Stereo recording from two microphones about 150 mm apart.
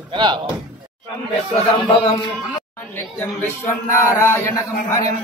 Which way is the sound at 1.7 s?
35° left (ahead or behind).